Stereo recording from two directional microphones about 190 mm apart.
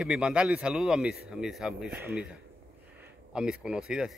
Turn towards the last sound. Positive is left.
turn(degrees=-5)  # may be behind; listen again after turning